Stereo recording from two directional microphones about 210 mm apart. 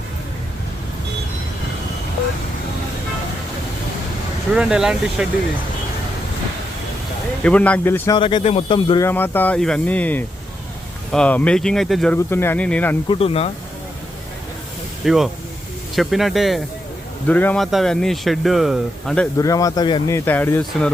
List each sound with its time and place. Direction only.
4.5 s speech: 5° right (ahead or behind)
7.4 s speech: 5° left (ahead or behind); by 9.0 s 25° left (ahead or behind)
9.0 s speech: 10° left (ahead or behind)
13.1 s speech: 30° left (ahead or behind)
15.0 s speech: centre (ahead or behind)
19.4 s speech: 15° left (ahead or behind)